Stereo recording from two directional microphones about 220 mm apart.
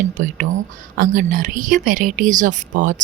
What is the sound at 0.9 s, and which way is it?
Speech, 40° right (ahead or behind).